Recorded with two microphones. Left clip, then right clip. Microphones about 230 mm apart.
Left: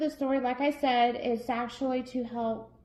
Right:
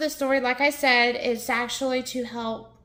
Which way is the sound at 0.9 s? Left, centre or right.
Right.